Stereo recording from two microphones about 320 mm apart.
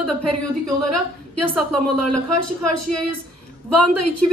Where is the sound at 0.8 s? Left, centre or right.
Right.